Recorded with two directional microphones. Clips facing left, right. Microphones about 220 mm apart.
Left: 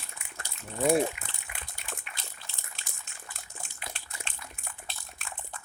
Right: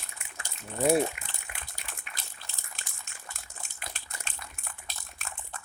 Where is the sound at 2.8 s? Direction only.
50° right (ahead or behind).